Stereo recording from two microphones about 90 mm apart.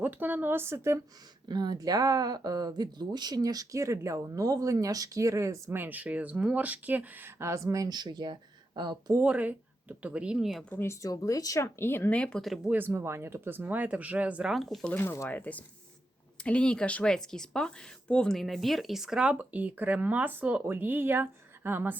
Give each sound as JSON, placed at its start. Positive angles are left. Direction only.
{"t": 0.0, "sound": "speech", "side_deg": -20}
{"t": 1.5, "sound": "speech", "side_deg": -50}
{"t": 5.7, "sound": "speech", "side_deg": -20}
{"t": 9.2, "sound": "speech", "side_deg": -15}
{"t": 11.0, "sound": "speech", "side_deg": 40}
{"t": 12.1, "sound": "speech", "side_deg": 10}
{"t": 12.6, "sound": "speech", "side_deg": -20}
{"t": 14.5, "sound": "speech", "side_deg": 0}
{"t": 14.9, "sound": "speech", "side_deg": 30}
{"t": 15.3, "sound": "speech", "side_deg": 15}